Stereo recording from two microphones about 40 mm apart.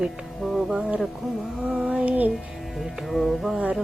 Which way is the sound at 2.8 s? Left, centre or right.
Centre.